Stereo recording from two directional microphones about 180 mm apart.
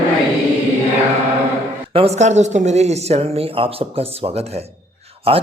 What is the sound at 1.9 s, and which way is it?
Speech, 35° right (ahead or behind).